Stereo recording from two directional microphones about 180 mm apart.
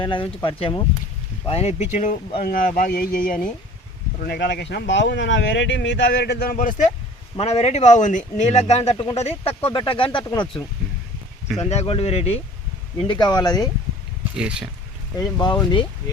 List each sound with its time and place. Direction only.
0.0 s speech: 25° left (ahead or behind)
2.4 s speech: 50° left (ahead or behind)
4.2 s speech: 65° left (ahead or behind); by 6.9 s 45° left (ahead or behind)
7.3 s speech: 35° left (ahead or behind)
11.4 s speech: centre (ahead or behind)
11.7 s speech: 35° left (ahead or behind)
14.3 s speech: 5° right (ahead or behind)
15.2 s speech: 20° left (ahead or behind)